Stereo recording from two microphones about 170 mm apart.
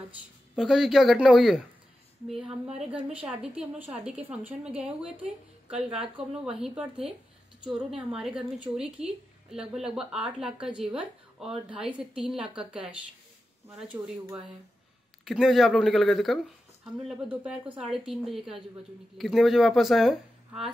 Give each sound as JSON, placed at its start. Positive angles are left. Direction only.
{"t": 0.6, "sound": "a woman's voice", "side_deg": 0}
{"t": 13.7, "sound": "speech", "side_deg": -5}
{"t": 15.2, "sound": "speech", "side_deg": 0}